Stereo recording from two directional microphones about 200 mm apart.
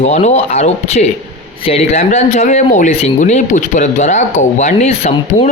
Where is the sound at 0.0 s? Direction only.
35° left (ahead or behind).